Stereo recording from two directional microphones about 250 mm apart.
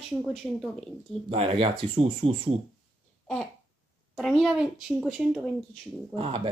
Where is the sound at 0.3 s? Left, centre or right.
Centre.